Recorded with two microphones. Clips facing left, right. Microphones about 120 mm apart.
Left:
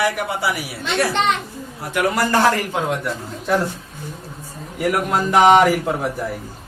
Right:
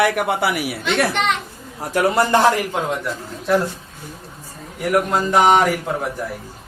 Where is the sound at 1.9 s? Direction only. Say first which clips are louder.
Right 2 dB; 30° right (ahead or behind).